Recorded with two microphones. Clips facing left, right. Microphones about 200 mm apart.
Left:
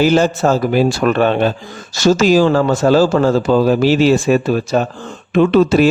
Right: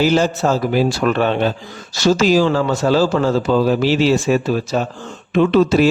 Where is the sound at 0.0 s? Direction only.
50° left (ahead or behind).